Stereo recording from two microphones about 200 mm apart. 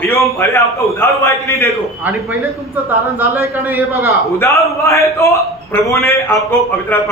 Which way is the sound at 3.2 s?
10° right (ahead or behind).